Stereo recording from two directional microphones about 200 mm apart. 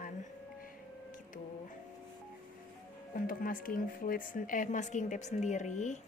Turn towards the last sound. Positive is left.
turn(degrees=35)  # may be behind; listen again after turning